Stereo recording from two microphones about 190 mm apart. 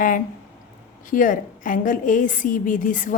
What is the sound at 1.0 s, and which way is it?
A woman's voice, 45° left (ahead or behind).